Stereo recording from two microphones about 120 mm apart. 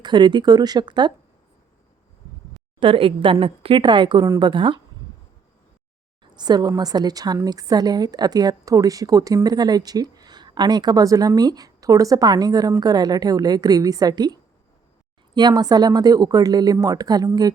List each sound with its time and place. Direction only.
0.0 s a woman's voice: 40° right (ahead or behind)
2.8 s a woman's voice: 45° right (ahead or behind)
6.3 s a woman's voice: 35° right (ahead or behind)
15.4 s a woman's voice: 35° right (ahead or behind)